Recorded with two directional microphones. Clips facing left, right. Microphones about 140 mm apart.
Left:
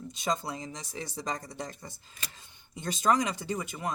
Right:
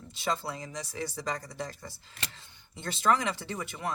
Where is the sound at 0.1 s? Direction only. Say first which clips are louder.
Even; 20° left (ahead or behind).